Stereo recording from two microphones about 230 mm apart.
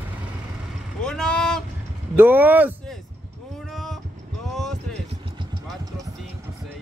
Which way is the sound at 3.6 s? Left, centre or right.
Centre.